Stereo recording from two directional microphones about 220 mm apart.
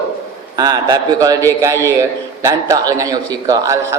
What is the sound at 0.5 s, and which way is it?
A man's voice, 15° right (ahead or behind).